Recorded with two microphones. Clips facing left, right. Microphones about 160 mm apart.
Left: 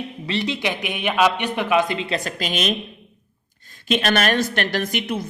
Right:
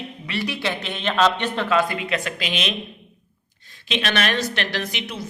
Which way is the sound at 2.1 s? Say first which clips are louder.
Left 1 dB; 40° left (ahead or behind).